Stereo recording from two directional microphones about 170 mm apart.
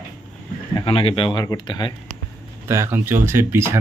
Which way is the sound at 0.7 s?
30° left (ahead or behind).